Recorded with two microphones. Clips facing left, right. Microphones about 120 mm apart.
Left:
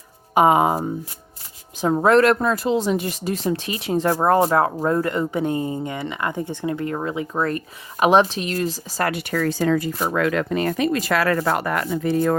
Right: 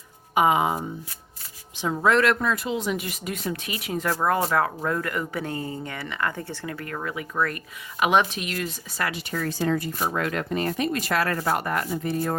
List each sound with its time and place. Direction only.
0.3 s speech: 40° left (ahead or behind)
9.0 s speech: 65° left (ahead or behind); by 12.2 s 90° left